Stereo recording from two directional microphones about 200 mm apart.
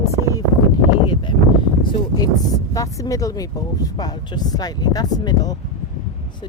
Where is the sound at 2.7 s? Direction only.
15° left (ahead or behind).